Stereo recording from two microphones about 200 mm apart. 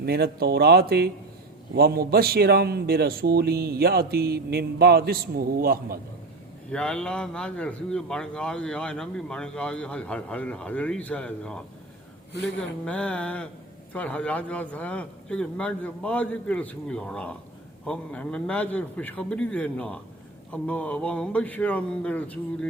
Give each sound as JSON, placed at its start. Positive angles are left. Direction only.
{"t": 0.0, "sound": "a man's voice", "side_deg": -50}
{"t": 6.7, "sound": "speech", "side_deg": 5}
{"t": 12.8, "sound": "a man's voice", "side_deg": 5}